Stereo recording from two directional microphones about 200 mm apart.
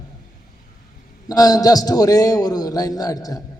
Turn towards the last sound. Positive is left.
turn(degrees=20)  # may be behind; listen again after turning